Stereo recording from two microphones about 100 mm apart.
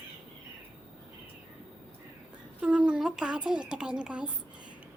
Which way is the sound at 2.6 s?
10° right (ahead or behind).